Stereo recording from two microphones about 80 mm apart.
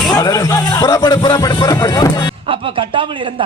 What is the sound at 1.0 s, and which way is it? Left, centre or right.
Speech, left.